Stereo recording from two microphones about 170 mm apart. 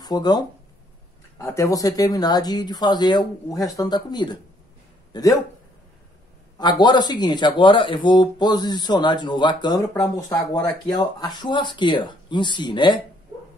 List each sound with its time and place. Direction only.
0.0 s speech: 25° left (ahead or behind)
6.6 s speech: 25° left (ahead or behind)